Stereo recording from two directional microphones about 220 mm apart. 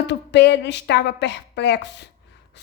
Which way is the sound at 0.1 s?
50° left (ahead or behind).